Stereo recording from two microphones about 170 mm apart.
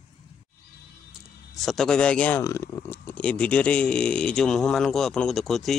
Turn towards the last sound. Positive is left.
turn(degrees=0)  # may be behind; listen again after turning